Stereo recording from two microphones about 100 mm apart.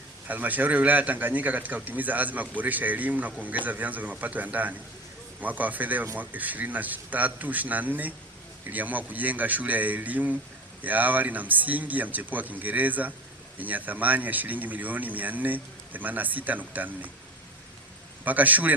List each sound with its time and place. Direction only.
0.3 s a man's voice: 15° right (ahead or behind)
18.3 s a man's voice: 15° right (ahead or behind)